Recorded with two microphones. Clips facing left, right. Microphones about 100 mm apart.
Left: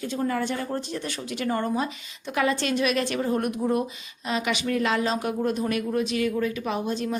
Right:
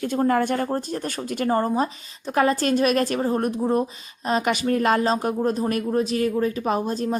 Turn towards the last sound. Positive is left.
turn(degrees=-40)  # may be behind; listen again after turning